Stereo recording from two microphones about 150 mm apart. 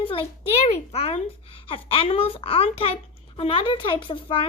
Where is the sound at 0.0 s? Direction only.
40° left (ahead or behind).